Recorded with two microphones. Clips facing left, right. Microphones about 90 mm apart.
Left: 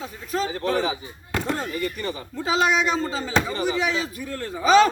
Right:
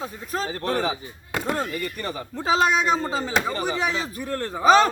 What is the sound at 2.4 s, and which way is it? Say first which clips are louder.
A man's voice: right 1 dB; 40° right (ahead or behind).